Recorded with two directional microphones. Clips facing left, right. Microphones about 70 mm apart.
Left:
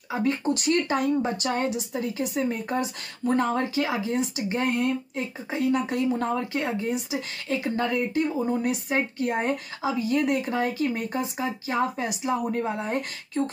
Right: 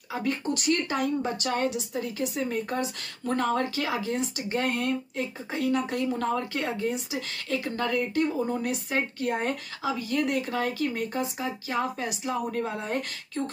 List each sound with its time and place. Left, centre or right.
0.1 s speech: left